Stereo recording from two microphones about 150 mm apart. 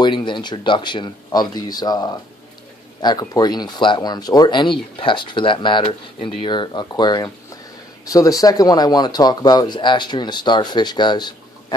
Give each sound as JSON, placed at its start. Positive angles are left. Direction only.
{"t": 0.0, "sound": "speech", "side_deg": 30}